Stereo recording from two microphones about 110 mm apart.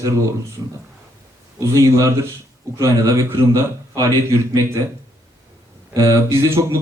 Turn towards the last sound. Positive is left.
turn(degrees=-25)  # may be behind; listen again after turning